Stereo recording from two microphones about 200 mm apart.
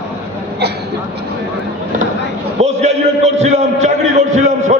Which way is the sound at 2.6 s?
35° right (ahead or behind).